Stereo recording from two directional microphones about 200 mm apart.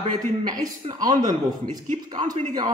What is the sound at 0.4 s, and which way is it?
Speech, 20° right (ahead or behind).